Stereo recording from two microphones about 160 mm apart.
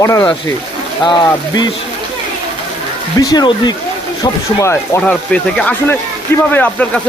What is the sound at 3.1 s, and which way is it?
Speech, 25° left (ahead or behind).